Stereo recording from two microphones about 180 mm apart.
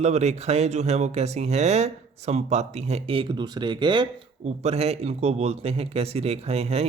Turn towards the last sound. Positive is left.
turn(degrees=-35)  # may be behind; listen again after turning